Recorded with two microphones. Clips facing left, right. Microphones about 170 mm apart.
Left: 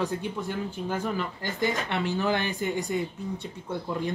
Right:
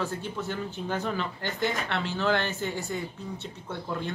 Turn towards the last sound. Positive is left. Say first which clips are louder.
# left 3 dB
turn(degrees=10)  # may be behind; listen again after turning